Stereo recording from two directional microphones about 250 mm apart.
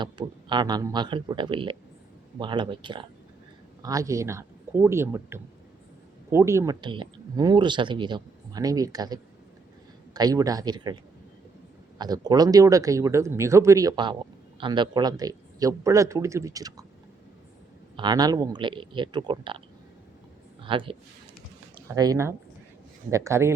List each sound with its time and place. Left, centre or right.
0.0 s speech: centre
11.9 s speech: centre
17.9 s speech: centre